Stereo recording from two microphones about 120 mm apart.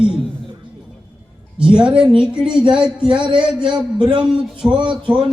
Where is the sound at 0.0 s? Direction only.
5° right (ahead or behind).